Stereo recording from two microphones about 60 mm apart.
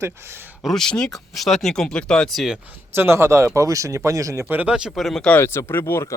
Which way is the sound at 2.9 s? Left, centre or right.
Right.